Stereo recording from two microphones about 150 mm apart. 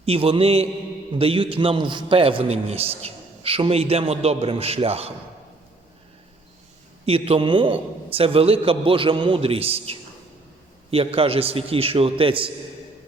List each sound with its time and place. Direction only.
0.0 s a man's voice: 40° right (ahead or behind)
7.0 s a man's voice: 40° right (ahead or behind)